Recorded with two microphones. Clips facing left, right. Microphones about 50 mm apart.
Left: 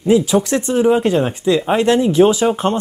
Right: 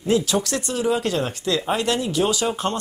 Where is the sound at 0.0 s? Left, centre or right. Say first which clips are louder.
Left 7 dB; centre.